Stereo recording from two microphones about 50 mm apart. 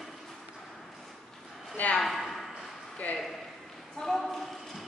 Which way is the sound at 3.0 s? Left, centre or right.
Left.